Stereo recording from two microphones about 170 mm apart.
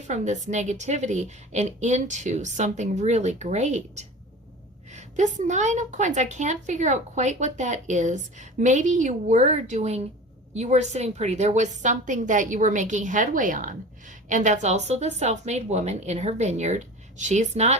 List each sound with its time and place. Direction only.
0.1 s a woman's voice: 45° right (ahead or behind)